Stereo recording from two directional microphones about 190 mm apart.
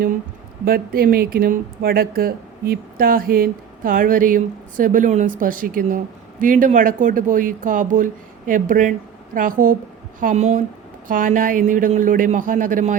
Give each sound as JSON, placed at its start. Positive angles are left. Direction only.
{"t": 0.6, "sound": "a woman's voice", "side_deg": -50}